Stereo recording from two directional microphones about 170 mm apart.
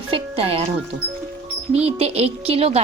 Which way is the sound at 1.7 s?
35° right (ahead or behind).